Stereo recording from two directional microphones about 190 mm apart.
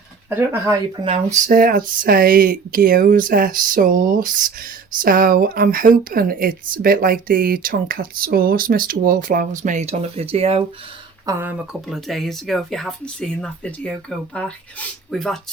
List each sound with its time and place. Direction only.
0.3 s speech: 15° right (ahead or behind)
1.0 s speech: 30° right (ahead or behind)
1.5 s speech: 45° right (ahead or behind); by 10.6 s 30° right (ahead or behind)
11.3 s speech: 10° right (ahead or behind)